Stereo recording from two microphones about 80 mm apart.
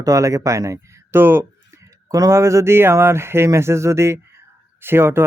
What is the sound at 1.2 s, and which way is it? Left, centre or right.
Speech, right.